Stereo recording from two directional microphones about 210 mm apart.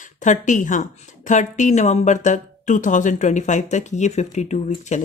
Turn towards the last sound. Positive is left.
turn(degrees=35)  # may be behind; listen again after turning